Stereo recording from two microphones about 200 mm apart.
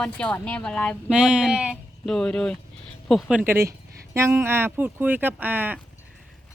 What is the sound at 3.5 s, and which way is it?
Speech, 15° right (ahead or behind).